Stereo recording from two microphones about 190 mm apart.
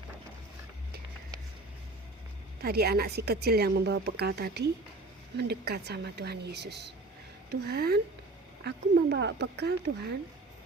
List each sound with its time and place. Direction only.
2.6 s a woman's voice: 55° right (ahead or behind)